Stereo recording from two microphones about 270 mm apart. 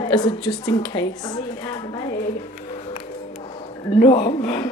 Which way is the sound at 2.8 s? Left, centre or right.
Left.